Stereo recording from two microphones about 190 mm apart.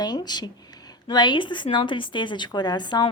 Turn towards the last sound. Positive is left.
turn(degrees=20)  # may be behind; listen again after turning